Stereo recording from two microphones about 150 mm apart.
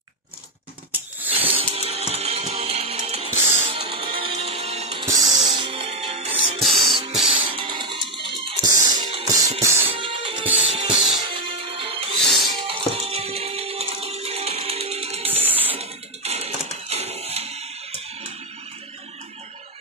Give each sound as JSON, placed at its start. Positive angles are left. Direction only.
{"t": 1.2, "sound": "a sound", "side_deg": -10}
{"t": 1.5, "sound": "music", "side_deg": -40}
{"t": 5.0, "sound": "music", "side_deg": -25}
{"t": 6.6, "sound": "music", "side_deg": 0}
{"t": 7.4, "sound": "music", "side_deg": -35}
{"t": 9.6, "sound": "music", "side_deg": -15}
{"t": 9.9, "sound": "music", "side_deg": -35}
{"t": 10.4, "sound": "music", "side_deg": -10}
{"t": 10.7, "sound": "music", "side_deg": -40}
{"t": 15.4, "sound": "music", "side_deg": -10}
{"t": 15.7, "sound": "a sound", "side_deg": -45}